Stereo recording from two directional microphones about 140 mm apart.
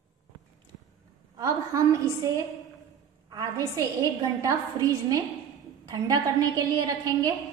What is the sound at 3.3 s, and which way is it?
A woman's voice, 25° right (ahead or behind).